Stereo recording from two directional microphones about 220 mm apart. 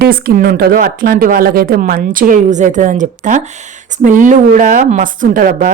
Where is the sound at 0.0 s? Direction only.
45° right (ahead or behind).